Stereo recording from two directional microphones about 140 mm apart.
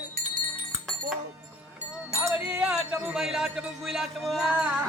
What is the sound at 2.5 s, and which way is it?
Music, 5° right (ahead or behind).